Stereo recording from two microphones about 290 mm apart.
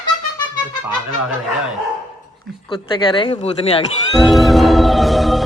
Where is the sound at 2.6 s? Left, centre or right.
Centre.